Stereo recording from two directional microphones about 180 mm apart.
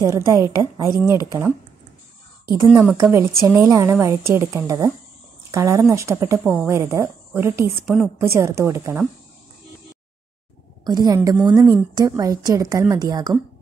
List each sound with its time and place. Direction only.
0.0 s a woman's voice: 15° right (ahead or behind)
2.6 s a woman's voice: 10° right (ahead or behind)
10.8 s a woman's voice: 20° right (ahead or behind)
11.3 s a woman's voice: centre (ahead or behind)
11.6 s a woman's voice: 20° right (ahead or behind)